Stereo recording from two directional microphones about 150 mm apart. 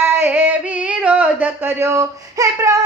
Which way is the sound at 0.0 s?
15° right (ahead or behind).